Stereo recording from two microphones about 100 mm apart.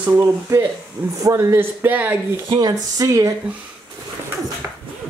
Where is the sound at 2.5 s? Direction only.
40° right (ahead or behind).